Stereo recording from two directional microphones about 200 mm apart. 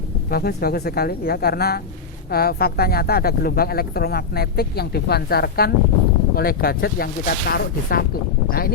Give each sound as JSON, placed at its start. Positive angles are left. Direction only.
{"t": 0.3, "sound": "speech", "side_deg": 50}